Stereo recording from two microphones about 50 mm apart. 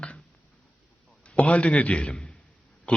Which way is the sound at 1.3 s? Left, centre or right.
Left.